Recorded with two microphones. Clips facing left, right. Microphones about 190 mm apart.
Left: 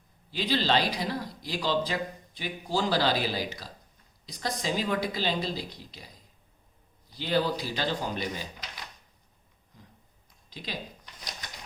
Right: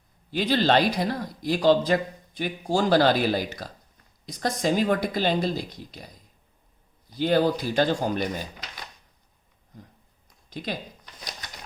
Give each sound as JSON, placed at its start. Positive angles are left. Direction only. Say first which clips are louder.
{"t": 0.3, "sound": "speech", "louder": "right 5 dB", "side_deg": -50}
{"t": 7.1, "sound": "speech", "louder": "right 6 dB", "side_deg": -50}
{"t": 10.5, "sound": "speech", "louder": "right 7 dB", "side_deg": -50}